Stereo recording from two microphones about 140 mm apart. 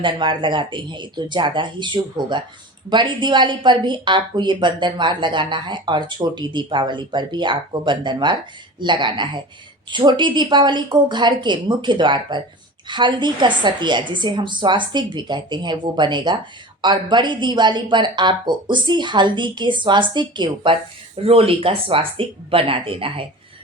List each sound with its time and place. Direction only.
0.0 s speech: 35° right (ahead or behind)